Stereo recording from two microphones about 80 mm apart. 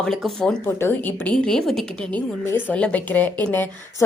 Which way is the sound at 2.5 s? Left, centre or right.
Left.